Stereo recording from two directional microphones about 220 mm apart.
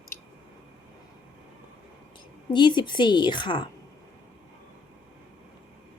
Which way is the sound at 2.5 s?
20° left (ahead or behind).